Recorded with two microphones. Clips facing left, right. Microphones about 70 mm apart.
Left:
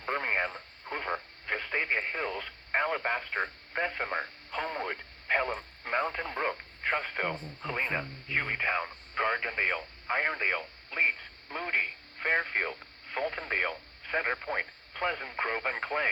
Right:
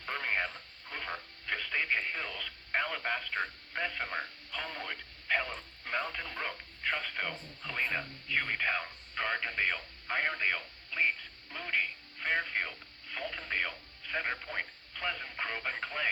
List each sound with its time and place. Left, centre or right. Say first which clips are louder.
0.0 s radio: left 4 dB; left